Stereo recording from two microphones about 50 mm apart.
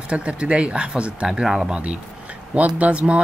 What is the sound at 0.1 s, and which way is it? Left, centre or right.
Speech, right.